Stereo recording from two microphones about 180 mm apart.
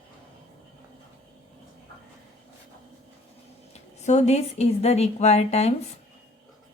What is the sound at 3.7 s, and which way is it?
Speech, 40° left (ahead or behind).